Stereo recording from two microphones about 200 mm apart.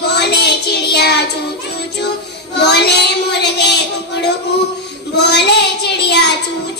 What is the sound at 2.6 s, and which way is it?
Child singing, 55° left (ahead or behind).